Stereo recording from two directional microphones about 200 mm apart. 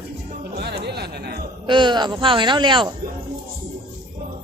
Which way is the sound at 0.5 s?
55° right (ahead or behind).